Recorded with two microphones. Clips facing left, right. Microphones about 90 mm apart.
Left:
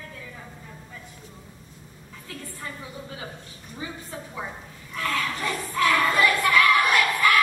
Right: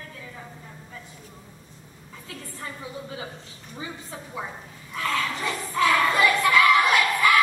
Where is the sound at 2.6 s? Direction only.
20° right (ahead or behind).